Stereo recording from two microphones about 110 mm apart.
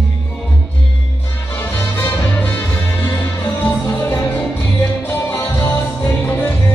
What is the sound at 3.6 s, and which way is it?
Music, 20° left (ahead or behind).